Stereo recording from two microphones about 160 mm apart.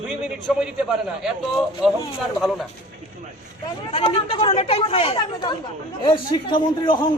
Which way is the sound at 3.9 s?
35° left (ahead or behind).